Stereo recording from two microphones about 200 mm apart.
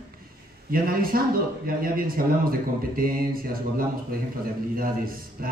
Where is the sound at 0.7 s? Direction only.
45° right (ahead or behind).